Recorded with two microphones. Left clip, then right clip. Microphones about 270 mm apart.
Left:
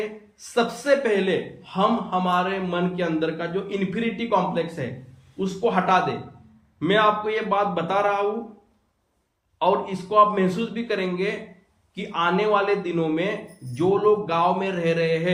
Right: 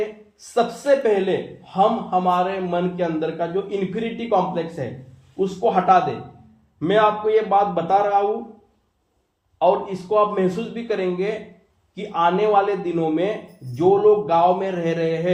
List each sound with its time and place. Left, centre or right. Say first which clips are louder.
0.3 s a man's voice: right 3 dB; centre
9.6 s a man's voice: right 3 dB; centre